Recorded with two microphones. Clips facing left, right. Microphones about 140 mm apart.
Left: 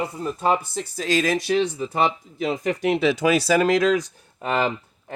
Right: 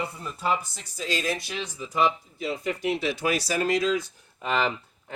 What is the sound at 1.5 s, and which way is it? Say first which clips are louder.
Speech: left 8 dB; 60° left (ahead or behind).